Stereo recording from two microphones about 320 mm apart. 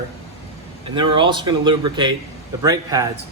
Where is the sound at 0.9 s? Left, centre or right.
Centre.